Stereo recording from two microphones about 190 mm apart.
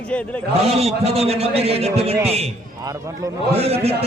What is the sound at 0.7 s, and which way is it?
A man's voice, 30° right (ahead or behind).